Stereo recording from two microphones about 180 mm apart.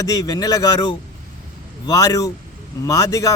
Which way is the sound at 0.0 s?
20° left (ahead or behind).